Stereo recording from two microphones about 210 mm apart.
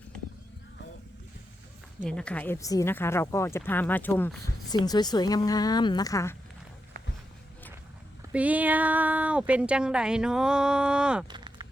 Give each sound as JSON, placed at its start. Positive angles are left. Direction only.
{"t": 2.0, "sound": "a woman's voice", "side_deg": 5}
{"t": 8.2, "sound": "speech", "side_deg": -5}
{"t": 11.3, "sound": "a sound", "side_deg": -20}